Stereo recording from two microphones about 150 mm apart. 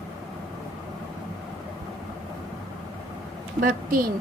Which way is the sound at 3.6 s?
70° right (ahead or behind).